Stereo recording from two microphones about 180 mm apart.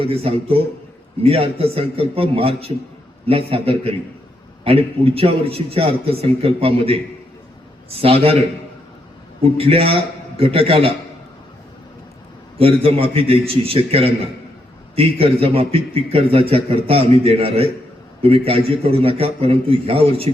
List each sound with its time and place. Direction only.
0.0 s a man's voice: 30° right (ahead or behind)
9.4 s a man's voice: 30° right (ahead or behind)
12.5 s a man's voice: 30° right (ahead or behind)